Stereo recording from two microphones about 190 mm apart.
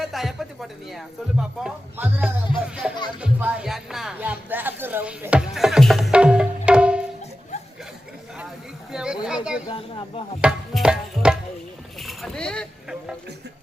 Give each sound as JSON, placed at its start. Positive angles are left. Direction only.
{"t": 0.0, "sound": "speech", "side_deg": 0}
{"t": 8.9, "sound": "a sound", "side_deg": -5}
{"t": 9.2, "sound": "speech", "side_deg": -5}
{"t": 9.6, "sound": "speech", "side_deg": 30}
{"t": 10.4, "sound": "music", "side_deg": -5}
{"t": 11.9, "sound": "speech", "side_deg": 0}